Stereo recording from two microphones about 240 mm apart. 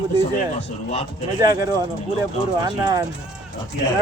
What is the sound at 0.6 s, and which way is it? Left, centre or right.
Speech, left.